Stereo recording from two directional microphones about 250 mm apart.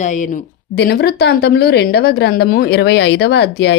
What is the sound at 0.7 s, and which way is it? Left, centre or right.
Speech, left.